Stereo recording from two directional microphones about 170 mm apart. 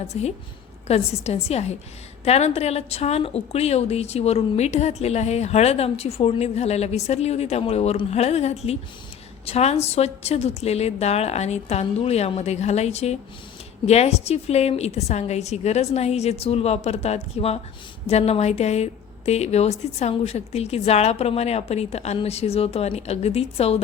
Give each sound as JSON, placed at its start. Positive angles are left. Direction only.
{"t": 0.1, "sound": "a woman's voice", "side_deg": 40}